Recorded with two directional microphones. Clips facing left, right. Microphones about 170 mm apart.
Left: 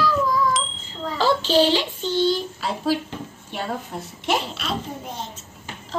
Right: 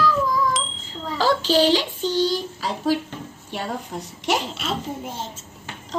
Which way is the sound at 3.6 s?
5° left (ahead or behind).